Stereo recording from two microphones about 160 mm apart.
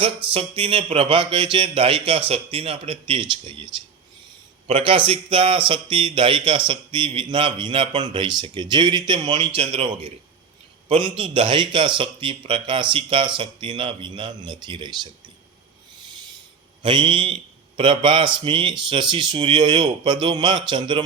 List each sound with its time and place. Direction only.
0.3 s a man's voice: 35° right (ahead or behind)
11.0 s a man's voice: 35° right (ahead or behind)
16.8 s a man's voice: 30° right (ahead or behind)